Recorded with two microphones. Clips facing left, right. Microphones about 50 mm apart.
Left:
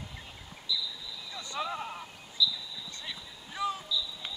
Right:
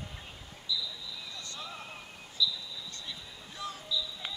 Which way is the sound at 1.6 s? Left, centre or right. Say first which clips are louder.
Left 11 dB; left.